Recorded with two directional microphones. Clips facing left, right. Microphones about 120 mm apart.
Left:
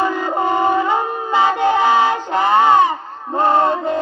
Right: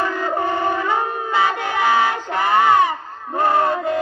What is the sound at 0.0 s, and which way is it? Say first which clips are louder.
Shofar: left 3 dB; 15° left (ahead or behind).